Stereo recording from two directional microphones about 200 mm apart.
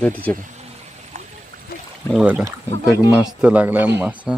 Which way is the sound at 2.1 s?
5° right (ahead or behind).